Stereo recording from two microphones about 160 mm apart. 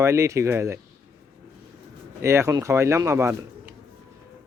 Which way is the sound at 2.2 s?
15° right (ahead or behind).